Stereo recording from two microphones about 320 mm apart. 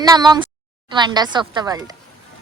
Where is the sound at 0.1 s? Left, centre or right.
Centre.